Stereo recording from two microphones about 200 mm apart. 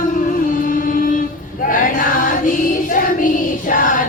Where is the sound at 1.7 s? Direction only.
45° left (ahead or behind).